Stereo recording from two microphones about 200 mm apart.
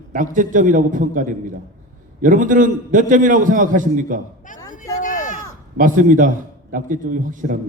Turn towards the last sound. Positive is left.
turn(degrees=-40)  # may be behind; listen again after turning